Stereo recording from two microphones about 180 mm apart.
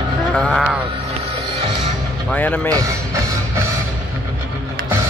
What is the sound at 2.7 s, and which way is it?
Speech, 20° right (ahead or behind).